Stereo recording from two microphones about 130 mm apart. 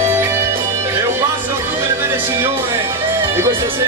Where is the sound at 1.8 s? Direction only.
20° right (ahead or behind).